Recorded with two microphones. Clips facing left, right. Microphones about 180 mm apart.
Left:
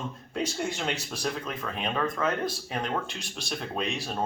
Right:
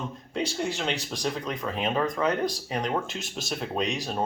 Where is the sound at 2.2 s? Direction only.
Centre (ahead or behind).